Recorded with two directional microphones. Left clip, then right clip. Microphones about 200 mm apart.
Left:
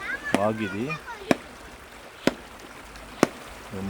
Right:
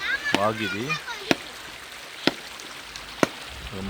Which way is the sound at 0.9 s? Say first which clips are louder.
Even; 70° left (ahead or behind).